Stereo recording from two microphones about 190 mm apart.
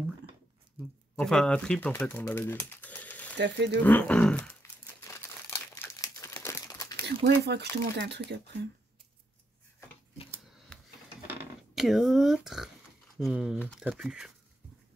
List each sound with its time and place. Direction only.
1.1 s speech: 5° left (ahead or behind)
3.3 s speech: 70° right (ahead or behind)
3.8 s speech: 10° left (ahead or behind)
5.0 s crumpling: 15° left (ahead or behind)
7.4 s speech: 60° right (ahead or behind)
11.7 s speech: centre (ahead or behind)